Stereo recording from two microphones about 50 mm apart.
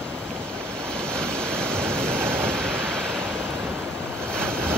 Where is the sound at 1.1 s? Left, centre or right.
Centre.